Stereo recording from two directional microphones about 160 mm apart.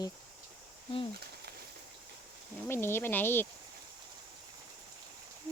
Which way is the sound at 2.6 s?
15° left (ahead or behind).